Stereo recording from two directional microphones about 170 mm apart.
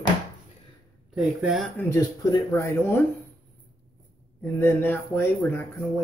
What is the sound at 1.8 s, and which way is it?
Speech, 15° left (ahead or behind).